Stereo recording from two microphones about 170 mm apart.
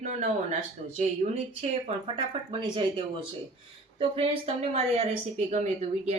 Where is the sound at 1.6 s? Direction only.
40° right (ahead or behind).